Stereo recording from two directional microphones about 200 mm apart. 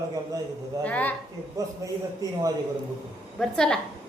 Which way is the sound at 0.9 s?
5° left (ahead or behind).